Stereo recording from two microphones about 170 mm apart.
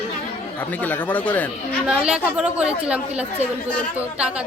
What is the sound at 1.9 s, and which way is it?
Speech, 5° right (ahead or behind).